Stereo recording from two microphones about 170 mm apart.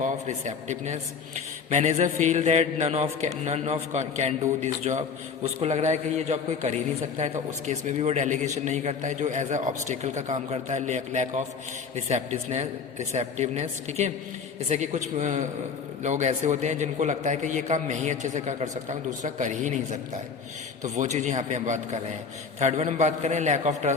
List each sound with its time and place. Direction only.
0.0 s a man's voice: 45° right (ahead or behind)